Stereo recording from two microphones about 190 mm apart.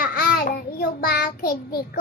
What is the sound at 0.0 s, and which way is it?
A child's voice, 50° left (ahead or behind).